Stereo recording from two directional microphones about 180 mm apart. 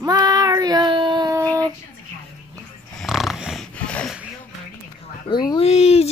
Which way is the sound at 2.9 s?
Centre (ahead or behind).